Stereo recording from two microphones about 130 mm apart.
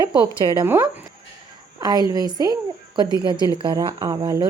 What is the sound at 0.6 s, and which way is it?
Speech, 15° right (ahead or behind).